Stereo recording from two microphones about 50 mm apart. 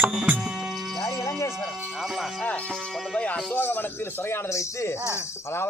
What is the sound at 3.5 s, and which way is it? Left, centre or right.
Speech, left.